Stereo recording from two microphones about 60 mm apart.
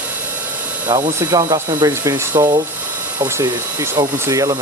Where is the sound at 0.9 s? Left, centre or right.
Right.